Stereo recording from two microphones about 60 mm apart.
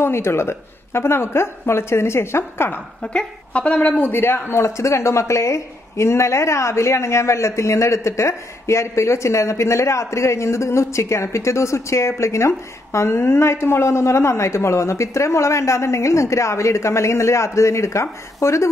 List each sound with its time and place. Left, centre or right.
0.0 s a woman's voice: left
3.0 s a man's voice: centre; by 18.7 s left